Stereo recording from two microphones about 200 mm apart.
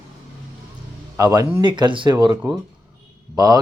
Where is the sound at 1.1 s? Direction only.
15° right (ahead or behind).